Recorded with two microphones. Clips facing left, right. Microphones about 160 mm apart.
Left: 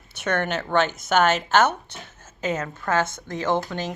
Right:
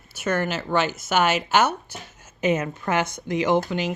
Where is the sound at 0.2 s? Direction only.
5° right (ahead or behind).